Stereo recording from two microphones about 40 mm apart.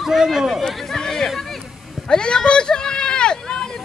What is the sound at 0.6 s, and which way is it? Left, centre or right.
Chatter, centre.